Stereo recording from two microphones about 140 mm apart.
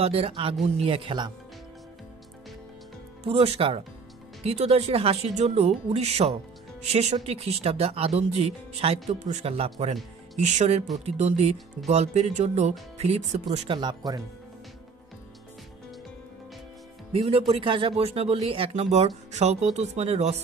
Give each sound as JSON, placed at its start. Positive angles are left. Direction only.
{"t": 0.0, "sound": "speech", "side_deg": -45}
{"t": 3.3, "sound": "speech", "side_deg": -45}
{"t": 13.7, "sound": "speech", "side_deg": -30}
{"t": 17.1, "sound": "speech", "side_deg": -45}